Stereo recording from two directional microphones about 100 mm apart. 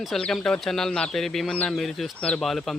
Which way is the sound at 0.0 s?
5° left (ahead or behind).